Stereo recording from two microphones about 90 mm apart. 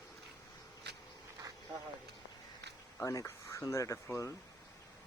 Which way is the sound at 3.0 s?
35° left (ahead or behind).